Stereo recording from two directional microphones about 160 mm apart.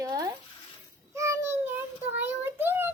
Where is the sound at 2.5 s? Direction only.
15° right (ahead or behind).